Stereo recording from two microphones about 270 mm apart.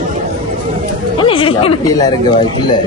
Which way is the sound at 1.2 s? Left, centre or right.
Centre.